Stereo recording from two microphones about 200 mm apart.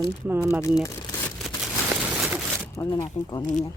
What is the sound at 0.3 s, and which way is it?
Speech, 15° right (ahead or behind).